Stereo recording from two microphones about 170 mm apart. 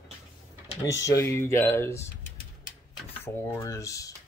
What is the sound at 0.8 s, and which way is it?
Speech, 20° left (ahead or behind).